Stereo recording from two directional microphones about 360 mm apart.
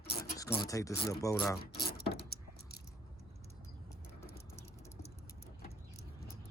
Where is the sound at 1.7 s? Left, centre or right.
Left.